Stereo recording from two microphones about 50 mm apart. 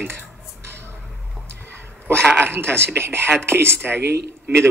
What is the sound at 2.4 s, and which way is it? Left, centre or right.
Speech, right.